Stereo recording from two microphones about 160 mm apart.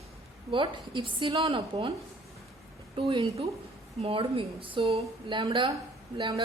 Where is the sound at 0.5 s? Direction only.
30° right (ahead or behind).